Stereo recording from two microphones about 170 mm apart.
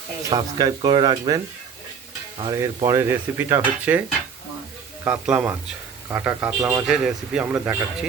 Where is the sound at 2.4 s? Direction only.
25° right (ahead or behind).